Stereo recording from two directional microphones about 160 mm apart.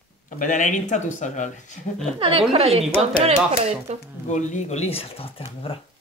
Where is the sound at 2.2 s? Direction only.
35° right (ahead or behind).